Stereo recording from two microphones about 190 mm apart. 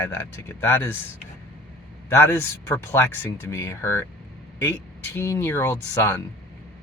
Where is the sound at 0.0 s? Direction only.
15° left (ahead or behind).